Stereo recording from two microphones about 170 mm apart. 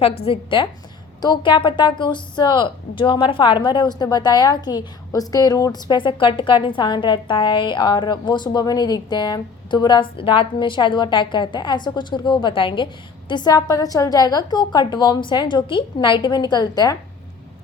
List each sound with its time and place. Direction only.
0.3 s a woman's voice: 30° left (ahead or behind)